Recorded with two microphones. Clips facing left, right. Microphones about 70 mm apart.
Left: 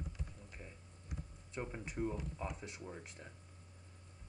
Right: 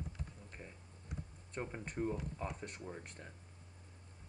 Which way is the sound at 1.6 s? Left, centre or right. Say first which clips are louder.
Right 1 dB; centre.